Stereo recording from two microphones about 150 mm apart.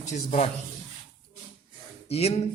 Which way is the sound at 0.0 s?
50° left (ahead or behind).